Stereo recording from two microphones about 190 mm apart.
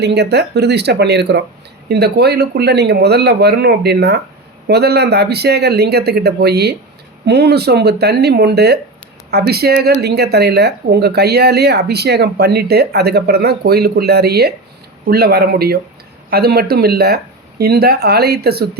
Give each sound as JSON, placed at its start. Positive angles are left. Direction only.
{"t": 0.0, "sound": "speech", "side_deg": -60}